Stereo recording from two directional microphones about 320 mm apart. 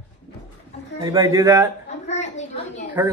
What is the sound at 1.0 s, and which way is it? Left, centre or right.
Speech, centre.